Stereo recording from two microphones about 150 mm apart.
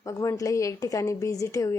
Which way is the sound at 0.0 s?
20° left (ahead or behind).